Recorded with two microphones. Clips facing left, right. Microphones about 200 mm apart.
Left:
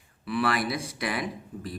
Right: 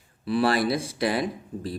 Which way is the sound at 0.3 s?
30° right (ahead or behind).